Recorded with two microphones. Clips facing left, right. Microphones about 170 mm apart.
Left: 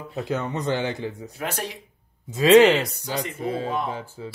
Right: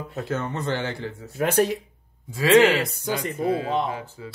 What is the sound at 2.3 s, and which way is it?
Speech, 20° left (ahead or behind).